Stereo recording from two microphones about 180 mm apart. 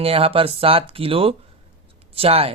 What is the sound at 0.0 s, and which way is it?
Speech, 30° right (ahead or behind).